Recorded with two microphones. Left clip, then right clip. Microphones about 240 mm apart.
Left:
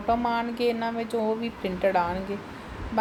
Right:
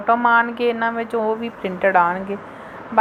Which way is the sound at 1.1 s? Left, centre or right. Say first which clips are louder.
Right 3 dB; right.